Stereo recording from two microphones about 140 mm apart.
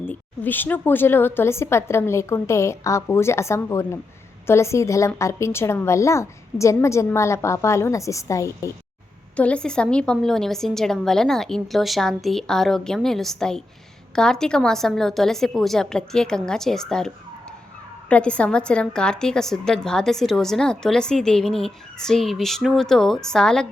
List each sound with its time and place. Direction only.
0.1 s a woman's voice: 15° left (ahead or behind)
9.3 s a woman's voice: 10° left (ahead or behind)
18.1 s a woman's voice: 10° left (ahead or behind)